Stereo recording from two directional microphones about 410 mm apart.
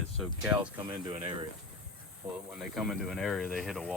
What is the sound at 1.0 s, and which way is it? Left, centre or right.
Speech, centre.